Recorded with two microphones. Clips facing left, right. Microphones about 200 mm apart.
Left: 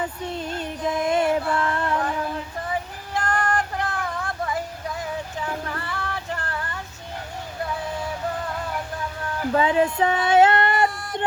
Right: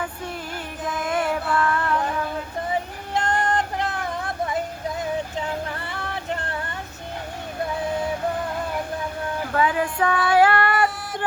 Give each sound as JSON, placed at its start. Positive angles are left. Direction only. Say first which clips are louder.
{"t": 0.0, "sound": "music", "louder": "left 2 dB", "side_deg": 25}
{"t": 3.2, "sound": "music", "louder": "right 1 dB", "side_deg": -20}
{"t": 5.9, "sound": "music", "louder": "right 1 dB", "side_deg": -20}
{"t": 9.6, "sound": "speech", "louder": "left 2 dB", "side_deg": 25}